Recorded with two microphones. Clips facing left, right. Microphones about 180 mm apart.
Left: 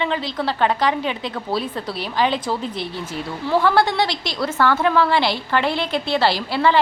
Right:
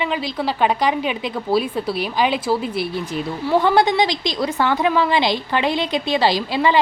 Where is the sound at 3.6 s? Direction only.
20° right (ahead or behind).